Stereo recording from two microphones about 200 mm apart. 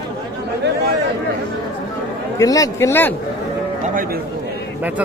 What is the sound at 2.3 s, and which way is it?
Speech, 15° left (ahead or behind).